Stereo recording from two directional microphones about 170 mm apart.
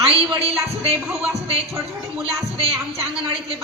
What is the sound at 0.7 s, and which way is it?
Music, 35° right (ahead or behind).